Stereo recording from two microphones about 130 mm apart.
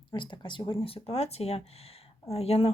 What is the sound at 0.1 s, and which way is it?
Speech, 35° left (ahead or behind).